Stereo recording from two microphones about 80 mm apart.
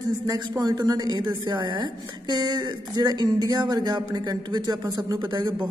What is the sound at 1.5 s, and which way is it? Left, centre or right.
Speech, right.